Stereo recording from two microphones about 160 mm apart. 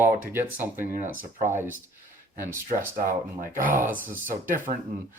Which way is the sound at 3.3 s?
60° right (ahead or behind).